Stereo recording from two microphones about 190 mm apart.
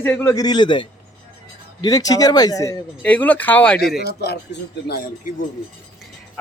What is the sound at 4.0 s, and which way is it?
Speech, 60° left (ahead or behind).